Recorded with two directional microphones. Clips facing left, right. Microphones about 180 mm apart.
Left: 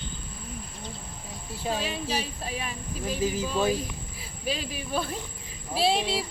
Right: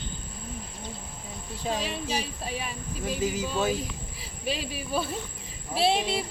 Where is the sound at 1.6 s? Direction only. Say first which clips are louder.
Even; 5° left (ahead or behind).